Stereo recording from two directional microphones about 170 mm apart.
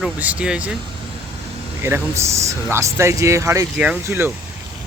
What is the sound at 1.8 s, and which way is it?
Speech, 15° right (ahead or behind).